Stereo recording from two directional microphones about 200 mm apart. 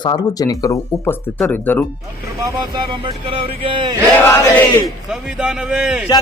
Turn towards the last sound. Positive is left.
turn(degrees=-5)  # may be behind; listen again after turning